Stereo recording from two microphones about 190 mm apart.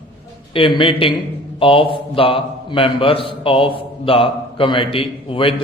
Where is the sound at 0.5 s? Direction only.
25° left (ahead or behind).